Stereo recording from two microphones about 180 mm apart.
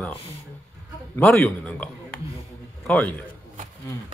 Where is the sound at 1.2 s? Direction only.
10° left (ahead or behind).